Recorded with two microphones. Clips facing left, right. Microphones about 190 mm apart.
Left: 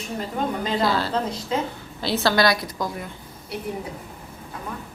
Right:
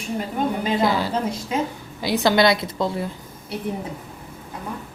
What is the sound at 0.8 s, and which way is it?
A woman's voice, 15° right (ahead or behind).